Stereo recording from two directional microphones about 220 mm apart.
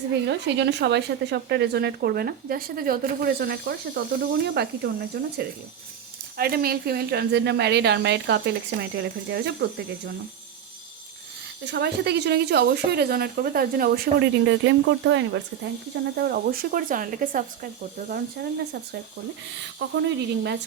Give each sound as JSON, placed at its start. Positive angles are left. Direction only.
{"t": 0.1, "sound": "speech", "side_deg": -50}
{"t": 11.6, "sound": "speech", "side_deg": -50}
{"t": 16.1, "sound": "speech", "side_deg": -45}
{"t": 20.1, "sound": "speech", "side_deg": -50}